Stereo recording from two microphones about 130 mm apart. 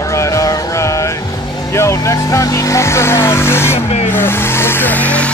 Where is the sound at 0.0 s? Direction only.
20° left (ahead or behind).